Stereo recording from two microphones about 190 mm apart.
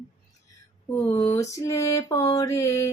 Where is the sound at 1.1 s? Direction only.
15° left (ahead or behind).